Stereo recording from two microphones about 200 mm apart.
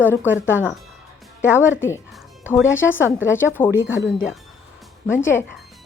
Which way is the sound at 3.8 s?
70° left (ahead or behind).